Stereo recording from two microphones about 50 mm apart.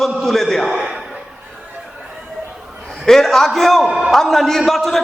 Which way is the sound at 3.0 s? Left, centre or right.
Centre.